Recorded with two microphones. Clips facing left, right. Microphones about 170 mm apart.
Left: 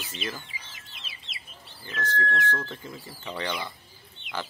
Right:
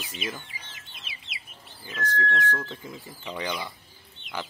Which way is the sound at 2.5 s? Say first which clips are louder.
Even; 15° right (ahead or behind).